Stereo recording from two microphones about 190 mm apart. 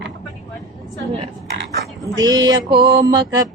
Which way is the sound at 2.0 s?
20° right (ahead or behind).